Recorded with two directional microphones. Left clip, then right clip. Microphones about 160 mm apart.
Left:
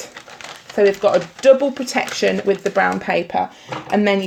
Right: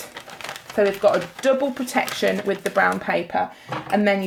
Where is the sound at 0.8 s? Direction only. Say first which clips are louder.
Left 3 dB; 45° left (ahead or behind).